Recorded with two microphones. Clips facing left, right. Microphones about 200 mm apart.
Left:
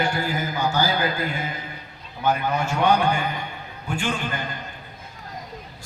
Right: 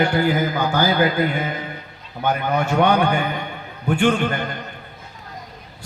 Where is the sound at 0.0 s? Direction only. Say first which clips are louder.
Right 7 dB; 60° right (ahead or behind).